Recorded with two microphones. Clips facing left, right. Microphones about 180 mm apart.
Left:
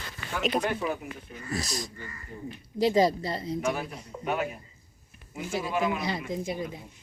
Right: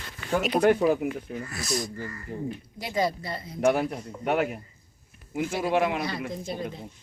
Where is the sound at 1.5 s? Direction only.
35° left (ahead or behind).